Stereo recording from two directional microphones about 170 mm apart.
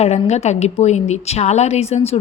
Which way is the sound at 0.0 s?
40° left (ahead or behind).